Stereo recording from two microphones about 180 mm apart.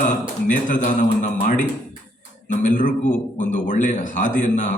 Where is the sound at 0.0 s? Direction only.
45° left (ahead or behind).